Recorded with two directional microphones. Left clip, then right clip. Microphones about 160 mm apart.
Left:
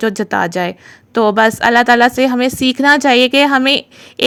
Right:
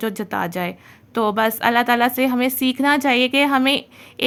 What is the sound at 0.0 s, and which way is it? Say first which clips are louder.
A woman's voice: left 8 dB; 35° left (ahead or behind).